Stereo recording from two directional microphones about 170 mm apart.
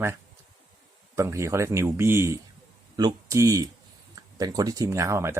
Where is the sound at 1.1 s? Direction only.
15° right (ahead or behind).